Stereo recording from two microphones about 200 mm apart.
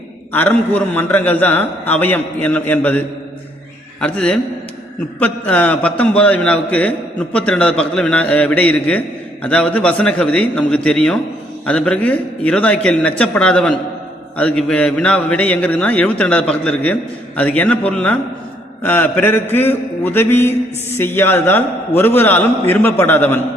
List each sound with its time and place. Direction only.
0.3 s a man's voice: 10° left (ahead or behind)
4.0 s a man's voice: 5° left (ahead or behind)